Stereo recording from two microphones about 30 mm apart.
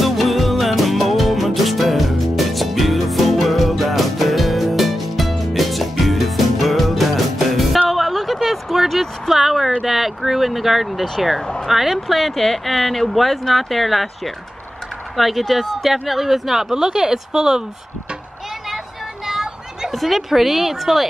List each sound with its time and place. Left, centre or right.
0.0 s music: centre
7.9 s a sound: centre
9.8 s vehicle: centre
11.6 s a woman's voice: centre
16.7 s speech: right
19.9 s a woman's voice: centre